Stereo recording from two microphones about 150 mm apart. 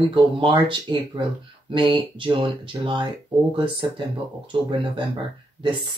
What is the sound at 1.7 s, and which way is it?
Speech, 35° right (ahead or behind).